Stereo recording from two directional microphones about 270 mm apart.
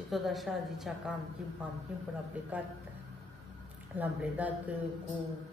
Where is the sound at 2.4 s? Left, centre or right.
Centre.